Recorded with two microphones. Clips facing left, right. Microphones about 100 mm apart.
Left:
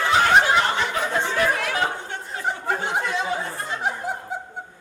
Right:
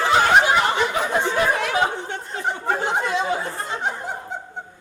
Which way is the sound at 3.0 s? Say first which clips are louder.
Right 3 dB; 20° right (ahead or behind).